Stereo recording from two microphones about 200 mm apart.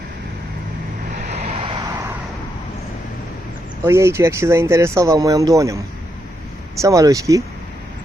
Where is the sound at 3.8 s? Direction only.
15° right (ahead or behind).